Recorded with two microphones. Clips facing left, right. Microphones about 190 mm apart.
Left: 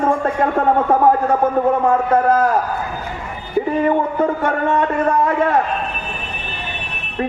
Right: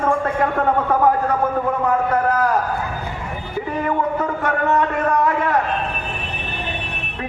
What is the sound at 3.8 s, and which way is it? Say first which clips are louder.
Speech: left 1 dB; 30° left (ahead or behind).